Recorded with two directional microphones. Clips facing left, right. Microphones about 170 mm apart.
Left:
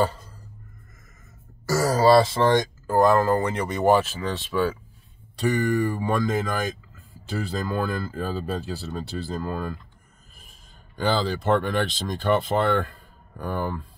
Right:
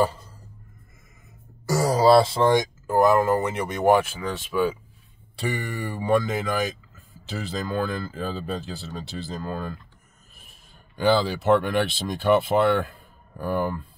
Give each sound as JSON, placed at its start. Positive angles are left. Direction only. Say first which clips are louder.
{"t": 1.7, "sound": "throat clearing", "louder": "even", "side_deg": -20}
{"t": 2.9, "sound": "speech", "louder": "even", "side_deg": -10}
{"t": 11.0, "sound": "speech", "louder": "right 3 dB", "side_deg": -10}